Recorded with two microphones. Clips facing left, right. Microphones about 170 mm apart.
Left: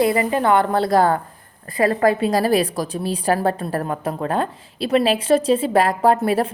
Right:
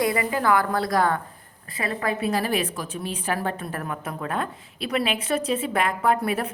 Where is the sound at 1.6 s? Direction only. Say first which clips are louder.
Left 10 dB; 45° left (ahead or behind).